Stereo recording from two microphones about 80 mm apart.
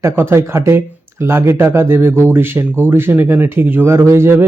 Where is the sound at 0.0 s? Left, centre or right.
Right.